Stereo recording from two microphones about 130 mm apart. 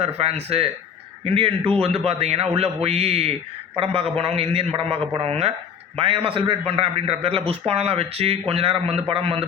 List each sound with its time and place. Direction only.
0.0 s speech: 55° right (ahead or behind)